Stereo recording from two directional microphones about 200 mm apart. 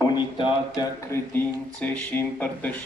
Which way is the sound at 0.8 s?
15° left (ahead or behind).